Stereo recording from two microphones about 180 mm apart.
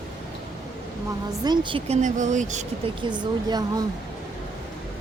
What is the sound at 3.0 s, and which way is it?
Speech, 25° right (ahead or behind).